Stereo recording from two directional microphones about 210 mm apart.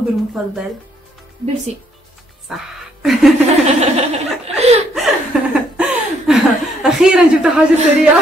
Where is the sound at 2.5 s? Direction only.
Centre (ahead or behind).